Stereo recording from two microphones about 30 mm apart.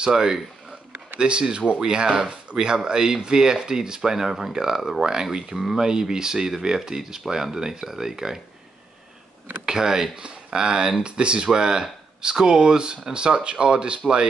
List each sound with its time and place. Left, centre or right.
0.0 s speech: right
1.1 s speech: right; by 5.0 s centre
5.0 s speech: right
9.7 s speech: right